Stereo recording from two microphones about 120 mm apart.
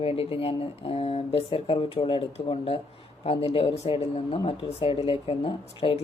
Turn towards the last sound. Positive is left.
turn(degrees=50)  # may be behind; listen again after turning